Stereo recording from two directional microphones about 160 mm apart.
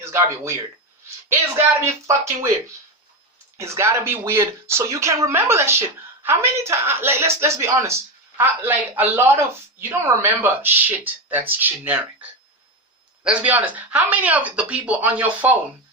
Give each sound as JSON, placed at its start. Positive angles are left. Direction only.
{"t": 0.0, "sound": "speech", "side_deg": -15}
{"t": 1.8, "sound": "speech", "side_deg": -20}
{"t": 3.6, "sound": "speech", "side_deg": -15}
{"t": 13.2, "sound": "speech", "side_deg": -5}